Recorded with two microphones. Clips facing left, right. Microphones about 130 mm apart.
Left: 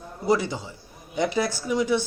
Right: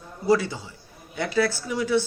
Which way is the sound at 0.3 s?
20° left (ahead or behind).